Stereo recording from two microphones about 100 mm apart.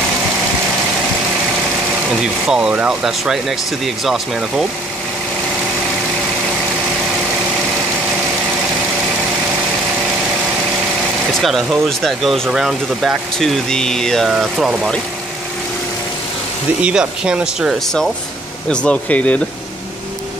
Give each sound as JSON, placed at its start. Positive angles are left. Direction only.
{"t": 2.4, "sound": "speech", "side_deg": -10}
{"t": 11.4, "sound": "speech", "side_deg": 0}
{"t": 14.3, "sound": "speech", "side_deg": -10}
{"t": 16.8, "sound": "speech", "side_deg": -10}
{"t": 18.7, "sound": "speech", "side_deg": 10}